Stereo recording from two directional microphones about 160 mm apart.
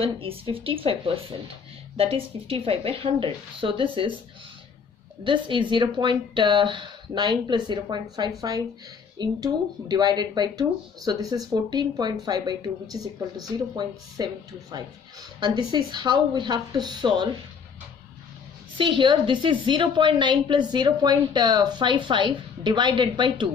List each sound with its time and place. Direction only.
0.0 s speech: 35° right (ahead or behind)
5.2 s speech: 30° right (ahead or behind)
18.8 s speech: 30° right (ahead or behind)